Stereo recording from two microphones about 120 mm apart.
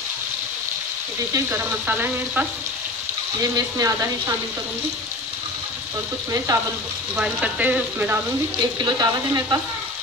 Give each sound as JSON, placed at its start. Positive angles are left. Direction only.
{"t": 1.3, "sound": "speech", "side_deg": -25}
{"t": 3.5, "sound": "speech", "side_deg": -30}
{"t": 6.3, "sound": "speech", "side_deg": -25}
{"t": 7.2, "sound": "speech", "side_deg": -10}
{"t": 8.8, "sound": "speech", "side_deg": -30}